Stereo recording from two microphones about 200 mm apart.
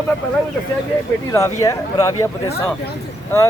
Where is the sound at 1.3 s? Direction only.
15° left (ahead or behind).